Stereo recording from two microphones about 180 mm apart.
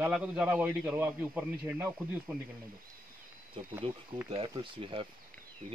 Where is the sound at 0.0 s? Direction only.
5° right (ahead or behind).